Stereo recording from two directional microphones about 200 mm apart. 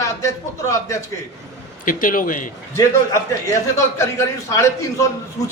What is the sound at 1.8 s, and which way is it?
Speech, 40° left (ahead or behind).